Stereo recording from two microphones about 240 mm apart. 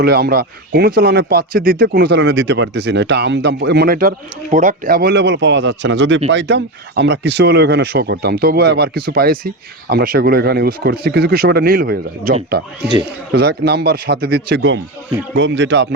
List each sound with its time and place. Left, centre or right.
0.0 s speech: right